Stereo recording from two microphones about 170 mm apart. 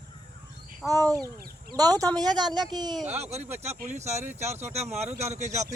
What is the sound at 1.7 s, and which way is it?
Speech, 20° right (ahead or behind).